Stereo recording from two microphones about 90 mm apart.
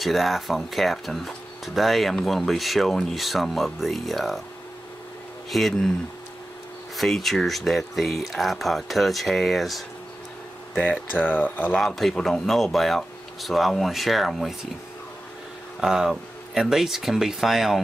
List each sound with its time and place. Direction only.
0.0 s speech: centre (ahead or behind)
5.5 s speech: centre (ahead or behind)
7.0 s speech: centre (ahead or behind)
10.9 s speech: 20° left (ahead or behind)
11.7 s speech: centre (ahead or behind)
15.8 s speech: 5° right (ahead or behind)